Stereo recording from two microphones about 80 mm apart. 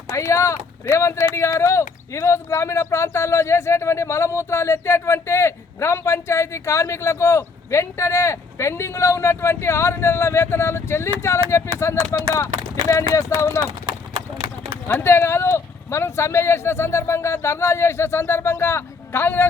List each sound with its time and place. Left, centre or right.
0.1 s speech: left
13.8 s clip-clop: right
15.0 s speech: left